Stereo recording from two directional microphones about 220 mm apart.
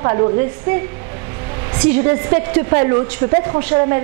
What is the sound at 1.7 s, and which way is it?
A woman's voice, 25° right (ahead or behind).